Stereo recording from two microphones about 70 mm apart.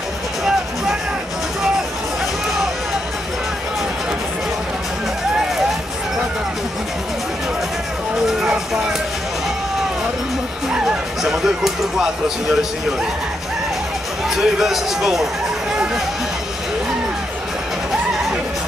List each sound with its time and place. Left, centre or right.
8.3 s a sound: centre
10.7 s music: centre
14.3 s a man's voice: centre